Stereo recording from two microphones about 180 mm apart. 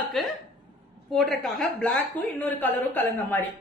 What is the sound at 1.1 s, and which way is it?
A woman's voice, centre (ahead or behind).